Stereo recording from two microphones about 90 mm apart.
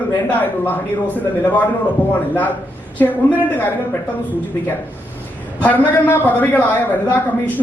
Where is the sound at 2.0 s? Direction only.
20° left (ahead or behind).